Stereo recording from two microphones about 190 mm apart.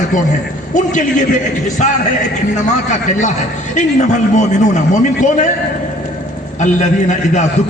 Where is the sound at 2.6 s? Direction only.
40° left (ahead or behind).